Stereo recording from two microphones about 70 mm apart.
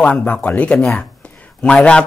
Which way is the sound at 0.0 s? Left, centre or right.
Left.